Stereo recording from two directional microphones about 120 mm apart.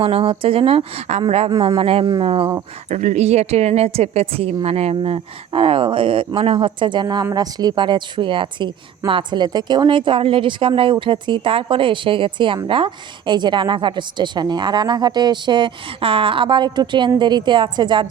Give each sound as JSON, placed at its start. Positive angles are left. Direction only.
{"t": 0.0, "sound": "speech", "side_deg": -50}
{"t": 2.9, "sound": "a woman's voice", "side_deg": -80}
{"t": 4.9, "sound": "a woman's voice", "side_deg": -50}